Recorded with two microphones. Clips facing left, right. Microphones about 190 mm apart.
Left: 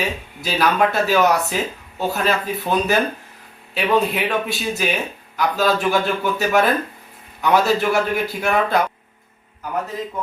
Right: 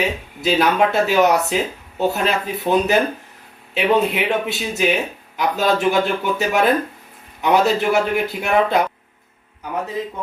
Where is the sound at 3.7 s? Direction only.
20° right (ahead or behind).